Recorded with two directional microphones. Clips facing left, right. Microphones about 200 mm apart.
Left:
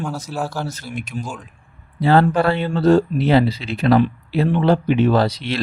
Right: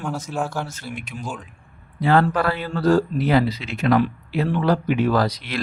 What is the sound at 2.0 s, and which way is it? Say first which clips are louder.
A man's voice: left 3 dB; 30° left (ahead or behind).